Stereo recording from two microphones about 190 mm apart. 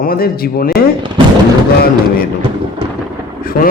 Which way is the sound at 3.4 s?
50° left (ahead or behind).